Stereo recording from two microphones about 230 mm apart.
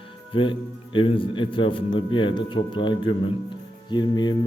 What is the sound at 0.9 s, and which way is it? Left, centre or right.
Speech, left.